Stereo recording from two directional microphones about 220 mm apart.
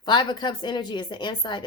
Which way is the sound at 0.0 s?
20° left (ahead or behind).